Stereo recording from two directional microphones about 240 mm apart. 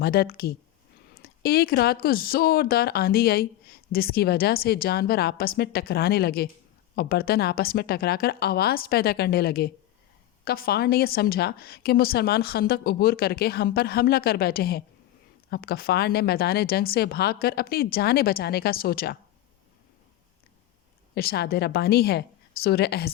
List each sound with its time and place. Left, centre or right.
0.0 s speech: left
21.2 s speech: left